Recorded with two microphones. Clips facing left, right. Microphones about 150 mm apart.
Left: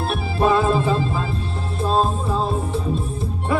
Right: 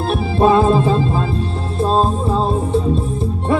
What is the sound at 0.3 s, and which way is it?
Music, 30° right (ahead or behind).